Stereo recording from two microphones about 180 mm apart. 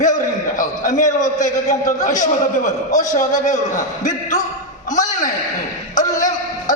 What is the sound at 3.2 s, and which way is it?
A man's voice, 20° left (ahead or behind).